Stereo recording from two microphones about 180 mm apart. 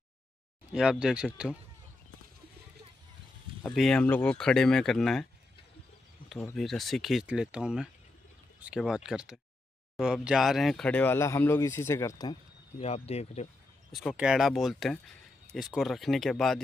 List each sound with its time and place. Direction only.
0.7 s speech: 5° right (ahead or behind)
3.7 s speech: 5° left (ahead or behind)
6.5 s speech: centre (ahead or behind); by 12.8 s 25° left (ahead or behind)
12.8 s speech: 35° left (ahead or behind)
13.9 s speech: 5° right (ahead or behind)